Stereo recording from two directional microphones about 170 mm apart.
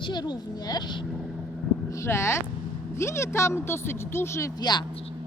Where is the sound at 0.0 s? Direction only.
25° left (ahead or behind).